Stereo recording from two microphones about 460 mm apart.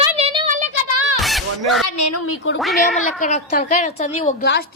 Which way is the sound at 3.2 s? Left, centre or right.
Centre.